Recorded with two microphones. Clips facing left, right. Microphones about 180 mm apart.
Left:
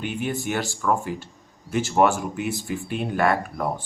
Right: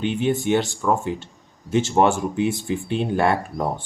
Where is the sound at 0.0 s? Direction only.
25° right (ahead or behind).